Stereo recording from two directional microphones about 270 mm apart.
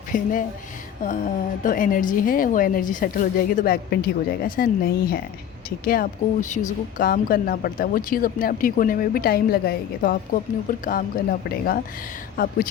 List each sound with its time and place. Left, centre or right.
0.1 s speech: left
1.6 s speech: left